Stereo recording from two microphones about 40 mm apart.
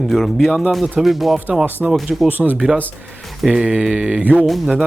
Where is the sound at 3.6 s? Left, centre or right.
Centre.